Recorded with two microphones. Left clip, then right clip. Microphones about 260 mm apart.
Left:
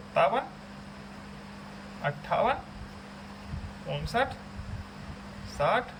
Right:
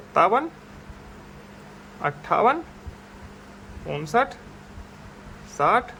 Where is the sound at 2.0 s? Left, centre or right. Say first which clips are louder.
Right 7 dB; centre.